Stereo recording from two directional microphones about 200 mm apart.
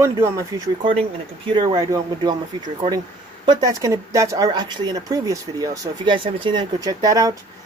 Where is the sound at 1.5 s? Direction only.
20° right (ahead or behind).